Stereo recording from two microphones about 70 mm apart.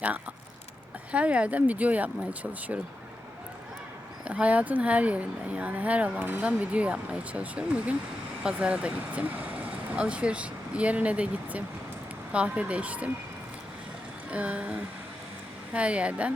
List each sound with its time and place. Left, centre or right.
1.1 s speech: centre
4.3 s speech: centre
14.3 s speech: right